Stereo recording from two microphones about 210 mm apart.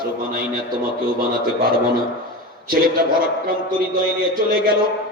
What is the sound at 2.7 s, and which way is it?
A woman's voice, 45° right (ahead or behind).